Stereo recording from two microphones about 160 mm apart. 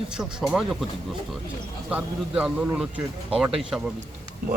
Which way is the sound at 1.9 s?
5° right (ahead or behind).